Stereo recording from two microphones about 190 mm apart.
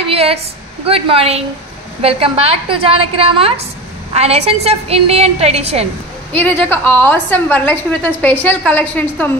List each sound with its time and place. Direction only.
0.1 s a sound: 30° right (ahead or behind)
0.8 s a woman's voice: 30° right (ahead or behind)
6.3 s a woman's voice: 10° left (ahead or behind)